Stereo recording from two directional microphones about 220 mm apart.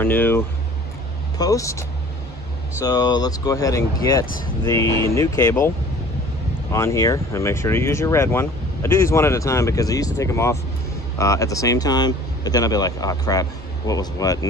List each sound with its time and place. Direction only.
0.0 s speech: 10° left (ahead or behind)
1.4 s speech: 15° left (ahead or behind)
6.7 s speech: 15° left (ahead or behind)